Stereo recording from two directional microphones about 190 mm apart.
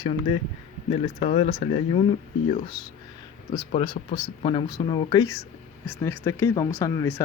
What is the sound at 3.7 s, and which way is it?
Speech, 25° left (ahead or behind).